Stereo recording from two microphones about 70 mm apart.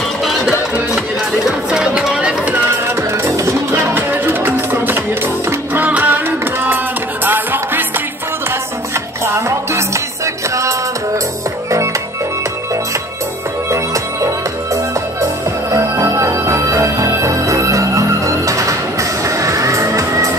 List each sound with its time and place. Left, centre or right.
0.2 s music: centre
3.0 s music: right
3.9 s music: right
9.2 s music: right
13.7 s music: right